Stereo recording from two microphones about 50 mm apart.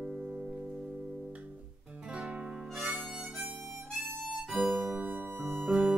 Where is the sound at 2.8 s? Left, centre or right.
Right.